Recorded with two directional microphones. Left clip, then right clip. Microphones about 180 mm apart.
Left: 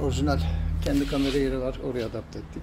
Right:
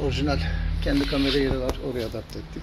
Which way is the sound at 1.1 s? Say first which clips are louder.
Right 2 dB; 5° left (ahead or behind).